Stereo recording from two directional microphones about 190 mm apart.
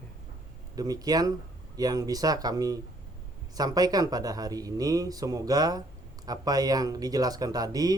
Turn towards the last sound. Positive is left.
turn(degrees=-20)  # may be behind; listen again after turning